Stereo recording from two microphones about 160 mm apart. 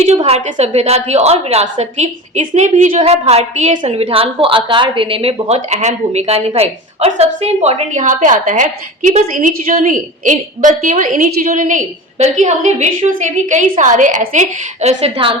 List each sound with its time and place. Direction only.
0.0 s a woman's voice: 45° right (ahead or behind)
3.0 s a woman's voice: 40° right (ahead or behind)